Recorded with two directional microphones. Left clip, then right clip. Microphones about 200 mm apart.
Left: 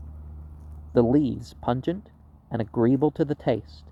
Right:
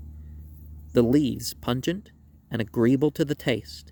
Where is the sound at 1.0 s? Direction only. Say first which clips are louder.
Even; 55° right (ahead or behind).